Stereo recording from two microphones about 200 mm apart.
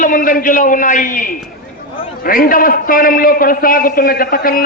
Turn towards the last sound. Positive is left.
turn(degrees=45)  # may be behind; listen again after turning